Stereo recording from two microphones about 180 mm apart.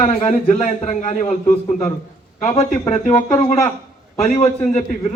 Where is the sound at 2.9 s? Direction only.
35° left (ahead or behind).